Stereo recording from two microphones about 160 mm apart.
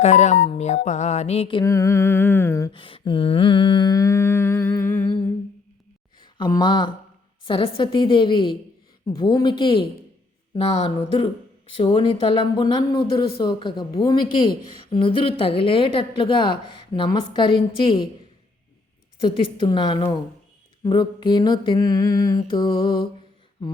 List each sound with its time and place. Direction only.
0.0 s music: 45° left (ahead or behind)
1.6 s music: 20° left (ahead or behind)
2.7 s humming: 30° left (ahead or behind); by 5.0 s 10° left (ahead or behind)
6.3 s mantra: 25° left (ahead or behind)
7.4 s a woman's voice: 30° left (ahead or behind)
13.4 s mantra: 30° left (ahead or behind)
14.8 s a woman's voice: 30° left (ahead or behind)
19.2 s mantra: 30° left (ahead or behind)